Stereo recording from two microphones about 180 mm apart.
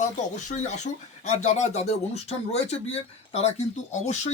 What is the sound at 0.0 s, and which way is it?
Speech, 40° left (ahead or behind).